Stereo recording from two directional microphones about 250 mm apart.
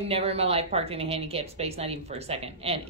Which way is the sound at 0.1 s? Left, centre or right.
Right.